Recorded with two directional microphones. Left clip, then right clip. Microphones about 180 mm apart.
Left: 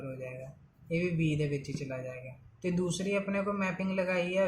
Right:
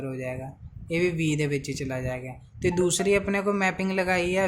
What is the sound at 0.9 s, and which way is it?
A man's voice, 60° right (ahead or behind).